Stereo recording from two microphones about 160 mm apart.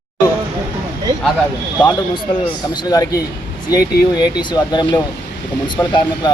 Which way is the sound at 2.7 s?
25° left (ahead or behind).